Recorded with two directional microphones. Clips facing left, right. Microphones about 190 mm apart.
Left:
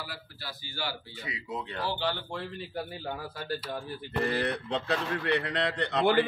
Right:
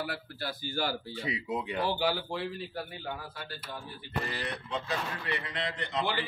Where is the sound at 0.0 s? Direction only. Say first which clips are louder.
Right 6 dB; 55° right (ahead or behind).